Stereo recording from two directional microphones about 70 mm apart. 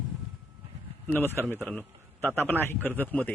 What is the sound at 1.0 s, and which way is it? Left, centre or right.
Speech, left.